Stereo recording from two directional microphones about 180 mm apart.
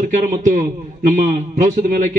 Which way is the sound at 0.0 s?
45° right (ahead or behind).